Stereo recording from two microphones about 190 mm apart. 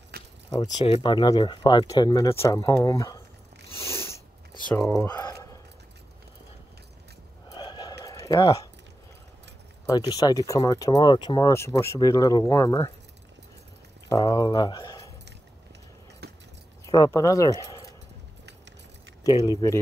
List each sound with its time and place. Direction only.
0.1 s keys jangling: 55° right (ahead or behind)
0.5 s speech: 20° left (ahead or behind)
3.7 s biting: 15° left (ahead or behind)
4.9 s speech: 10° left (ahead or behind)
5.2 s a sound: 20° left (ahead or behind)
7.4 s a sound: 25° left (ahead or behind)
9.8 s speech: 20° left (ahead or behind)
14.0 s speech: 20° left (ahead or behind)
16.2 s keys jangling: 55° right (ahead or behind)
16.8 s speech: 20° left (ahead or behind)
19.2 s speech: 20° left (ahead or behind)